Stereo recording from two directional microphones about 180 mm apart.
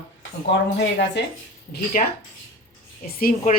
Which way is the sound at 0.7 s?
75° left (ahead or behind).